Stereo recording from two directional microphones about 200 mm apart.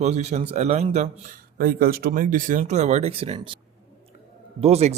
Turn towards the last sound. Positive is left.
turn(degrees=-30)  # may be behind; listen again after turning